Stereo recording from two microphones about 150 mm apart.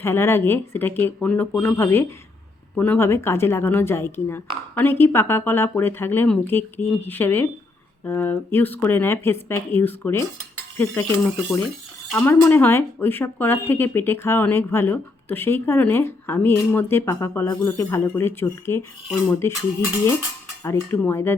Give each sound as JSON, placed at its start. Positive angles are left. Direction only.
{"t": 0.0, "sound": "speech", "side_deg": 15}
{"t": 11.6, "sound": "a sound", "side_deg": 5}
{"t": 12.2, "sound": "speech", "side_deg": 15}
{"t": 20.7, "sound": "speech", "side_deg": 15}